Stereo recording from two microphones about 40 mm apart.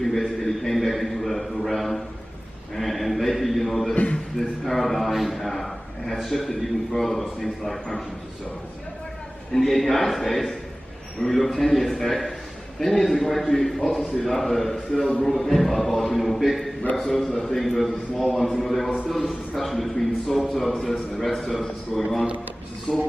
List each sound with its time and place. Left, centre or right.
0.0 s a man's voice: centre
2.7 s a sound: centre
3.9 s a man's voice: left
4.4 s a man's voice: centre
9.5 s a man's voice: centre
9.8 s a man's voice: centre
16.9 s a man's voice: centre
21.2 s a man's voice: centre
22.9 s speech: right